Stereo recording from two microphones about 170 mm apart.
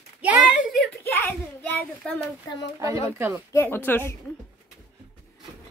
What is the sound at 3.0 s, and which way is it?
Speech, 15° right (ahead or behind).